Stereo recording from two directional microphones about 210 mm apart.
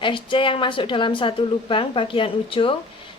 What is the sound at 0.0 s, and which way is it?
A woman's voice, 25° left (ahead or behind).